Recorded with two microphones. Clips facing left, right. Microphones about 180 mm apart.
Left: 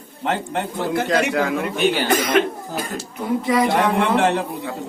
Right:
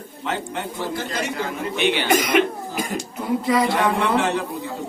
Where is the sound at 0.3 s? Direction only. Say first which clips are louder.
Left 4 dB; 60° left (ahead or behind); by 1.7 s 80° left.